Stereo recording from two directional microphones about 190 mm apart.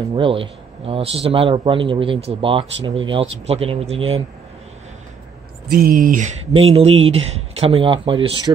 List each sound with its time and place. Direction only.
0.1 s speech: 30° right (ahead or behind)
5.7 s speech: 50° right (ahead or behind); by 8.3 s 25° right (ahead or behind)